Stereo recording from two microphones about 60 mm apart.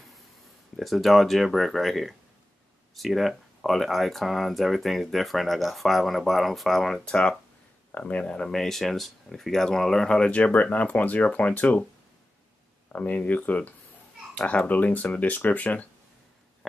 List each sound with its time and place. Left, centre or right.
0.7 s speech: centre
7.1 s speech: centre
12.9 s speech: left